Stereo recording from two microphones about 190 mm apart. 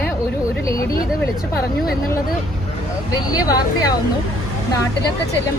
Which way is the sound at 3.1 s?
20° left (ahead or behind).